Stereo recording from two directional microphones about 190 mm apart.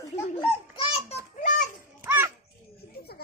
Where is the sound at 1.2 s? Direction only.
40° left (ahead or behind).